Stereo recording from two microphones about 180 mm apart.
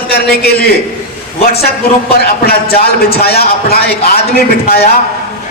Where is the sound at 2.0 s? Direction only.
60° left (ahead or behind).